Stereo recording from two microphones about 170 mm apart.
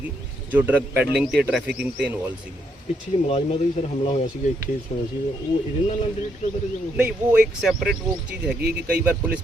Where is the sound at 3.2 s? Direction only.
35° left (ahead or behind).